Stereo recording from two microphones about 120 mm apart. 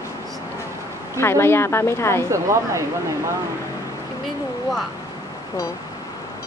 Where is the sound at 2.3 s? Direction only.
25° right (ahead or behind).